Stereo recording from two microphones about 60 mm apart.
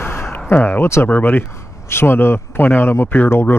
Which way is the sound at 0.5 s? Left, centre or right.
Left.